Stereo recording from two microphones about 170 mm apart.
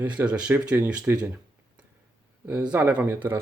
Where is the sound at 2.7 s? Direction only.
10° right (ahead or behind).